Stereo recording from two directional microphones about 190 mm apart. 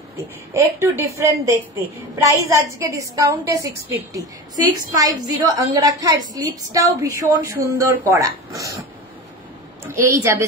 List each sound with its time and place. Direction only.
0.5 s a woman's voice: 15° right (ahead or behind)
9.8 s a woman's voice: 15° right (ahead or behind)